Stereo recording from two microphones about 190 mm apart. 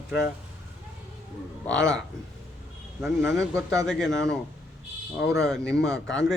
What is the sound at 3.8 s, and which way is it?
A man's voice, centre (ahead or behind).